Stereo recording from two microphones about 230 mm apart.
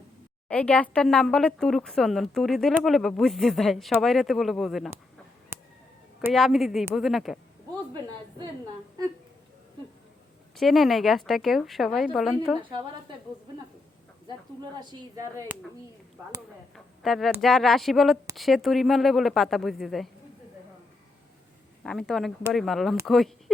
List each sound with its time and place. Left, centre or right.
0.4 s speech: centre
6.2 s speech: centre
10.6 s speech: centre
12.7 s a woman's voice: centre
14.8 s speech: centre
16.7 s speech: centre
21.8 s speech: centre